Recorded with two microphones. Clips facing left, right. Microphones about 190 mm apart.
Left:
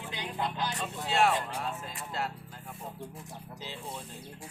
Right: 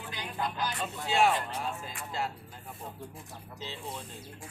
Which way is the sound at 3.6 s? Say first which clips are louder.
Right 2 dB; 10° left (ahead or behind).